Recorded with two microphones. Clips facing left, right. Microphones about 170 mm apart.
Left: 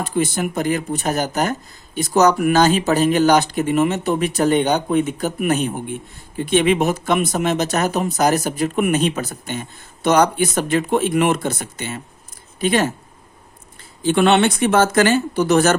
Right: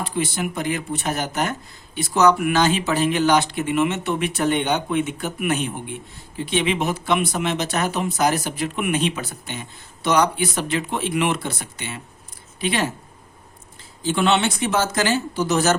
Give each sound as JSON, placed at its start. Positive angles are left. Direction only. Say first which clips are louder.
{"t": 0.0, "sound": "speech", "louder": "left 4 dB", "side_deg": 45}
{"t": 14.0, "sound": "speech", "louder": "left 5 dB", "side_deg": 60}